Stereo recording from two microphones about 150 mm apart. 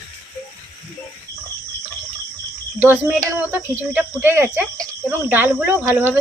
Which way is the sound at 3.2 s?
15° right (ahead or behind).